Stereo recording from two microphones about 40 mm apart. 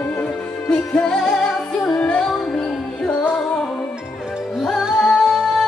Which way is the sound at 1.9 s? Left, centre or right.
Left.